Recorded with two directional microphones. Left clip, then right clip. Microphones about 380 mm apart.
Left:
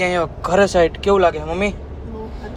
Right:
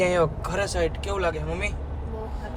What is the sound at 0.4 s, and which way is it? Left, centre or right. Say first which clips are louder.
Speech: left 12 dB; centre.